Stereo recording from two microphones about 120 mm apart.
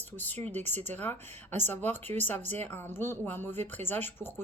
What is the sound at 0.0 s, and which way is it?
Speech, 15° left (ahead or behind).